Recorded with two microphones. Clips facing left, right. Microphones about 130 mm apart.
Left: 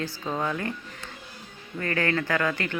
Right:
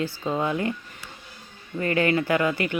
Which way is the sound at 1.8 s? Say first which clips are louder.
Right 4 dB; 15° right (ahead or behind).